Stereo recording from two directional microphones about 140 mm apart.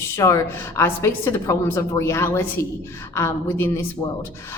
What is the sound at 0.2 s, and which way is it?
A woman's voice, 20° left (ahead or behind).